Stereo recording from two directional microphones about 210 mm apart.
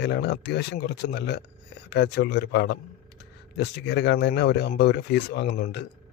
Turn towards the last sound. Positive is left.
turn(degrees=50)  # may be behind; listen again after turning